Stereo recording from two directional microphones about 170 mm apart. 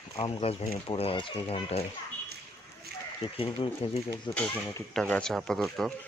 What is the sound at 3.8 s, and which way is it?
Speech, 35° left (ahead or behind).